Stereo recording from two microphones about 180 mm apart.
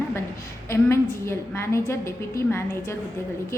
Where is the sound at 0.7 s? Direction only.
15° left (ahead or behind).